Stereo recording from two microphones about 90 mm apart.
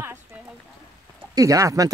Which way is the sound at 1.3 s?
35° right (ahead or behind).